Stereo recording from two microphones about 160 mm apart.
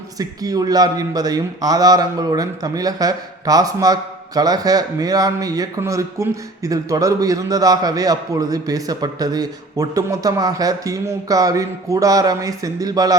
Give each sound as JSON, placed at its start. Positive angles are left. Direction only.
{"t": 0.2, "sound": "speech", "side_deg": -25}